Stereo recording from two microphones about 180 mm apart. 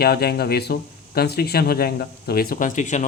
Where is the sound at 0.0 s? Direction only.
60° left (ahead or behind).